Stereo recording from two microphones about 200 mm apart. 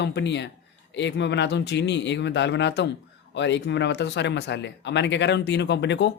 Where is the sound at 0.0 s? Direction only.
60° left (ahead or behind).